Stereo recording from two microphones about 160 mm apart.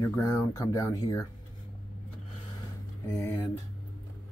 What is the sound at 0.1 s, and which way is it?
Speech, 20° left (ahead or behind).